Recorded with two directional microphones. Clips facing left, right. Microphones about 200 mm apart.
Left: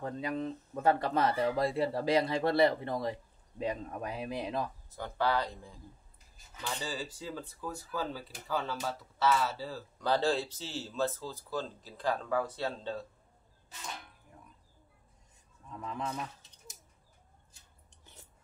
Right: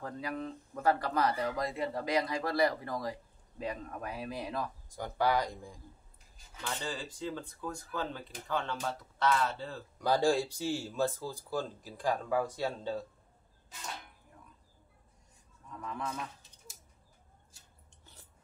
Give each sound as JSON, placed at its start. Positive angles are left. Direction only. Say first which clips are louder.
{"t": 0.0, "sound": "speech", "louder": "left 3 dB", "side_deg": 25}
{"t": 4.8, "sound": "speech", "louder": "right 4 dB", "side_deg": -15}
{"t": 6.6, "sound": "speech", "louder": "left 1 dB", "side_deg": 5}
{"t": 9.9, "sound": "speech", "louder": "right 2 dB", "side_deg": -10}
{"t": 15.8, "sound": "speech", "louder": "left 1 dB", "side_deg": 25}